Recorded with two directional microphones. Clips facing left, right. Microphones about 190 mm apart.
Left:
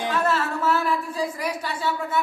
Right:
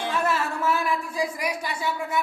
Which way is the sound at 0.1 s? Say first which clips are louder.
Left 2 dB; 10° right (ahead or behind).